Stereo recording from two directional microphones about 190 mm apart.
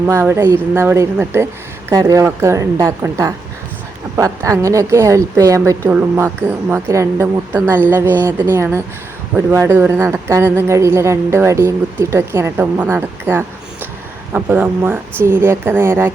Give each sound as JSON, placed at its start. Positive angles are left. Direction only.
{"t": 0.0, "sound": "speech", "side_deg": -15}